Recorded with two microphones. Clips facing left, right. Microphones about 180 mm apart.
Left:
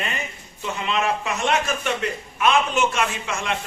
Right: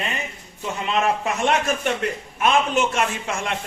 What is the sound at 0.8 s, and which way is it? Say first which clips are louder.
A man's voice: right 2 dB; 45° right (ahead or behind).